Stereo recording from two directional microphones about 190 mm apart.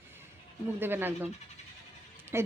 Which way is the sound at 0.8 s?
10° right (ahead or behind).